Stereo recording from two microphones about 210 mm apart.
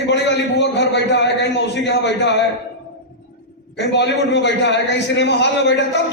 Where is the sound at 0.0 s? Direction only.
55° left (ahead or behind).